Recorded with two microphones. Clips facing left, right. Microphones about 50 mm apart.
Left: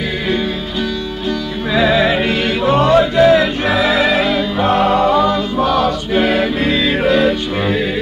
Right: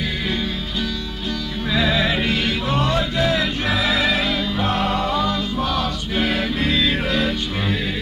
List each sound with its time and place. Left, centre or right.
1.7 s music: left